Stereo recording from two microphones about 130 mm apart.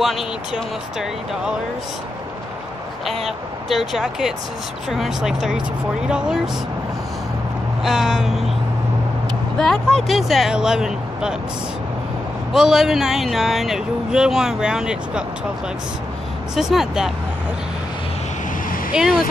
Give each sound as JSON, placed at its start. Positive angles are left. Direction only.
{"t": 0.0, "sound": "speech", "side_deg": 0}
{"t": 3.1, "sound": "speech", "side_deg": 0}
{"t": 7.8, "sound": "vehicle", "side_deg": -5}
{"t": 9.6, "sound": "speech", "side_deg": 5}
{"t": 12.5, "sound": "speech", "side_deg": -5}
{"t": 16.5, "sound": "speech", "side_deg": -5}